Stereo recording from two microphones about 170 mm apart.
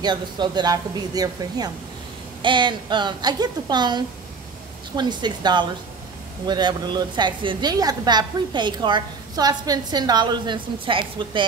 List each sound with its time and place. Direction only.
0.0 s a woman's voice: 25° right (ahead or behind)